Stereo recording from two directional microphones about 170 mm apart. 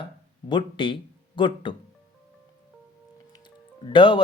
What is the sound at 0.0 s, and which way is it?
Speech, 30° left (ahead or behind).